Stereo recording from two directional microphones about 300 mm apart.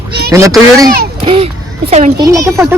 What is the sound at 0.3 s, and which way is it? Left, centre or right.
A child's voice, centre.